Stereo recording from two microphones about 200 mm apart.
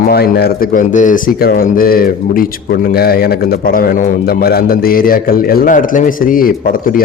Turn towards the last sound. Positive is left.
turn(degrees=45)  # may be behind; listen again after turning